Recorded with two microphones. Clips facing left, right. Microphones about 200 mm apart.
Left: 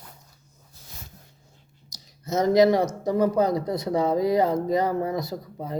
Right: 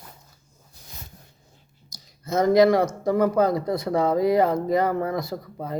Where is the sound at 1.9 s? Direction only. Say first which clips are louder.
Right 1 dB; 20° left (ahead or behind).